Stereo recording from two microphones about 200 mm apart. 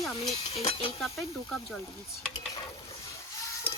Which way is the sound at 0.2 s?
30° left (ahead or behind).